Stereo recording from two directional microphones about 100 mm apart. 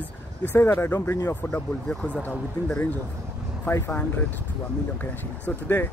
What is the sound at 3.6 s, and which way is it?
Speech, 25° left (ahead or behind).